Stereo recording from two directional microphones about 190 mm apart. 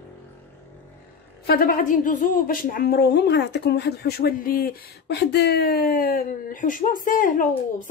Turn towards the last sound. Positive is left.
turn(degrees=45)  # may be behind; listen again after turning